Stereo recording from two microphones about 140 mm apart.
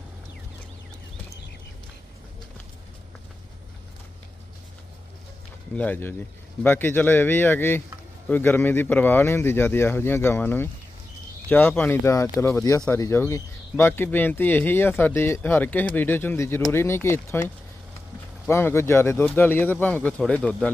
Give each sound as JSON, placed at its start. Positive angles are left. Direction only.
{"t": 5.7, "sound": "speech", "side_deg": 10}
{"t": 18.4, "sound": "speech", "side_deg": 15}